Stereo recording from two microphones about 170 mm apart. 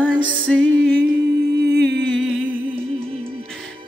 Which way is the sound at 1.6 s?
75° right (ahead or behind).